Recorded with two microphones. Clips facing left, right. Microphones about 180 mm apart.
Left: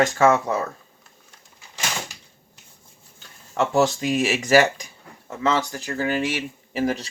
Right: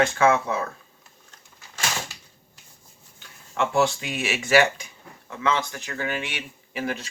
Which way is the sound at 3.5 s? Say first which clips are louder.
Left 3 dB; 40° left (ahead or behind).